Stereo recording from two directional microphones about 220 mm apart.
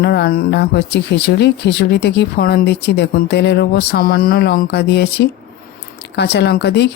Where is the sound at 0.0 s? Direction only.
45° left (ahead or behind).